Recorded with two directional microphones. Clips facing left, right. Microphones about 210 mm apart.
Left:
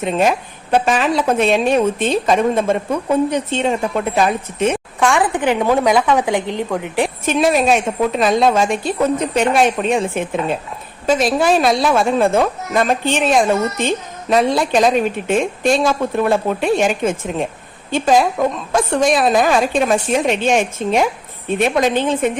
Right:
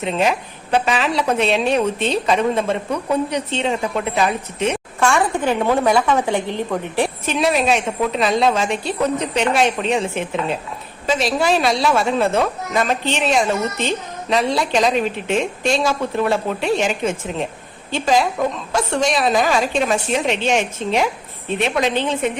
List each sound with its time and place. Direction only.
0.0 s a woman's voice: 45° left (ahead or behind)
4.9 s a woman's voice: 15° left (ahead or behind)
7.3 s a woman's voice: 45° left (ahead or behind)